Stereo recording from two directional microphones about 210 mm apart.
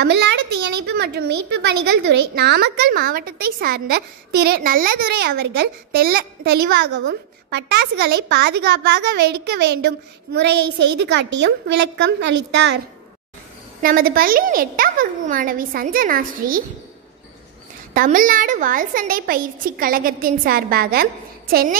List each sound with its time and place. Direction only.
0.0 s a woman's voice: 55° right (ahead or behind)
13.8 s a woman's voice: 45° right (ahead or behind)
17.9 s a woman's voice: 40° right (ahead or behind)